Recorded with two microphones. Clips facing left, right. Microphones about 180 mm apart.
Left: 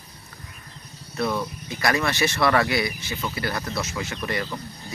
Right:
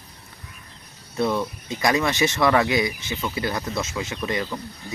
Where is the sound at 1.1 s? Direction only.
20° right (ahead or behind).